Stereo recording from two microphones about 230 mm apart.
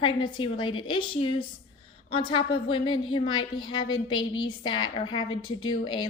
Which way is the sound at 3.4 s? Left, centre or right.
Left.